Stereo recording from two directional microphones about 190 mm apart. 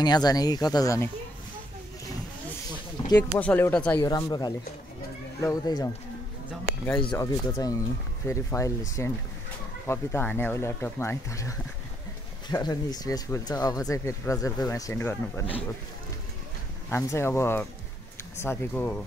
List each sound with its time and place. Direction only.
0.0 s speech: 20° left (ahead or behind)
3.2 s speech: 10° left (ahead or behind)
4.1 s speech: 20° left (ahead or behind)
7.2 s speech: 20° left (ahead or behind)
16.9 s speech: 15° left (ahead or behind)